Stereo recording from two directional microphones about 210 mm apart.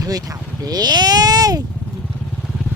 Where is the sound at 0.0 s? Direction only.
15° right (ahead or behind).